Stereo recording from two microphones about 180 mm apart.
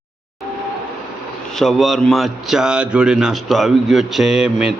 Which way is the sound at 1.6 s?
Centre (ahead or behind).